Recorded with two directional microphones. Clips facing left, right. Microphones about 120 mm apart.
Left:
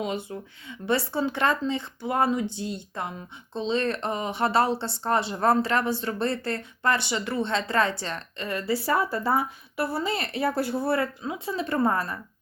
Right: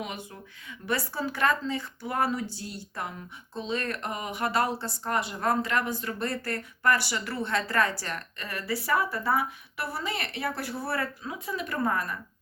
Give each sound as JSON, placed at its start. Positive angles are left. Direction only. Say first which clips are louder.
{"t": 0.0, "sound": "speech", "louder": "left 7 dB", "side_deg": 25}